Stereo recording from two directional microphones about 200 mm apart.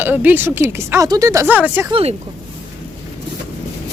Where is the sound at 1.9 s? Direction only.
30° right (ahead or behind).